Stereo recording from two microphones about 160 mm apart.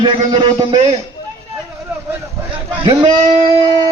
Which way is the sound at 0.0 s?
30° right (ahead or behind).